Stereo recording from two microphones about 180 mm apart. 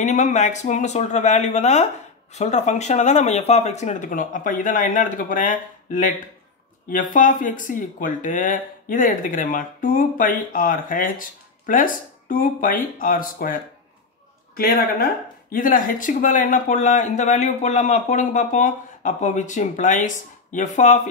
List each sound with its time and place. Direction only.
0.0 s speech: 40° left (ahead or behind)